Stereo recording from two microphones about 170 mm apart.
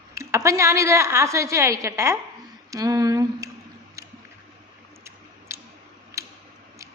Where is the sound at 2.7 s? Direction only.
20° right (ahead or behind).